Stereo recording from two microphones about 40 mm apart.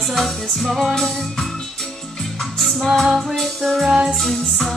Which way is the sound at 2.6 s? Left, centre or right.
Centre.